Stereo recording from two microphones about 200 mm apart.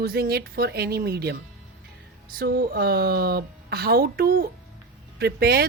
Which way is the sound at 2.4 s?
50° right (ahead or behind).